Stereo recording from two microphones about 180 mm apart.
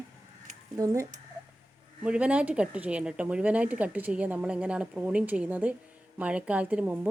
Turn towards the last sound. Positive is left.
turn(degrees=-10)  # may be behind; listen again after turning